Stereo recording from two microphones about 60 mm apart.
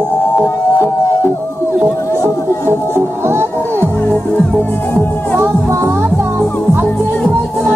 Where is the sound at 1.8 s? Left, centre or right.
Right.